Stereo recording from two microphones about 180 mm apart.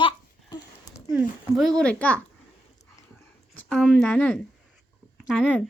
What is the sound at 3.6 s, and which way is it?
A child's voice, 5° left (ahead or behind).